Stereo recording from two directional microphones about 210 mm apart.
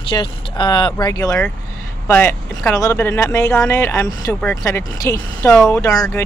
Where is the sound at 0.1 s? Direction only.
20° left (ahead or behind).